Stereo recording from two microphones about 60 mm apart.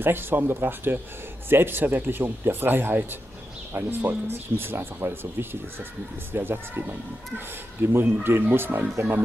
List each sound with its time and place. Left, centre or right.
0.0 s speech: right